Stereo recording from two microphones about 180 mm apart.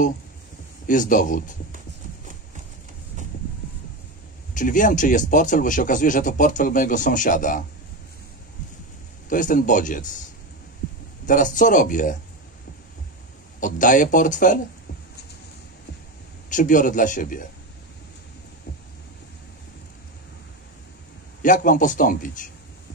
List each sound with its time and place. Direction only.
0.8 s a man's voice: 45° left (ahead or behind)
4.6 s a man's voice: 45° left (ahead or behind)
9.3 s a man's voice: 45° left (ahead or behind)
11.2 s a man's voice: 45° left (ahead or behind)
13.6 s a man's voice: 45° left (ahead or behind)
16.4 s a man's voice: 45° left (ahead or behind)
21.4 s a man's voice: 45° left (ahead or behind)